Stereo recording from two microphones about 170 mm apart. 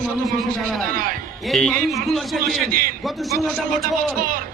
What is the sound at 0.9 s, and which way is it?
Speech, 55° right (ahead or behind).